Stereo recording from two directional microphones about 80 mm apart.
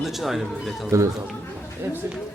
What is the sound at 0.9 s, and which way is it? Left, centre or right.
Speech, right.